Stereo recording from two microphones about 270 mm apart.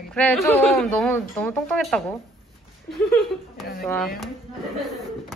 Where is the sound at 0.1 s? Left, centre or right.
Centre.